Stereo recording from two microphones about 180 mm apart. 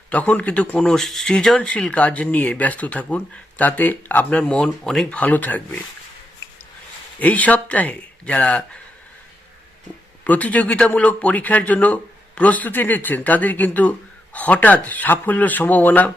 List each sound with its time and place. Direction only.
0.1 s speech: 10° left (ahead or behind)
7.2 s speech: 10° left (ahead or behind)
10.2 s speech: 10° left (ahead or behind)